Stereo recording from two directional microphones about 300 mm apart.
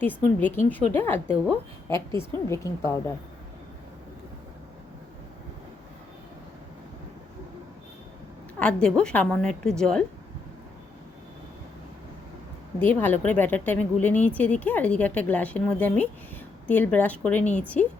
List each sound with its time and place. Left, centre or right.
0.0 s a woman's voice: centre
8.5 s speech: centre
12.8 s a woman's voice: centre